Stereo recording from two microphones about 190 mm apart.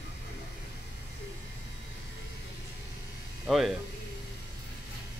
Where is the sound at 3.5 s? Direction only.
Centre (ahead or behind).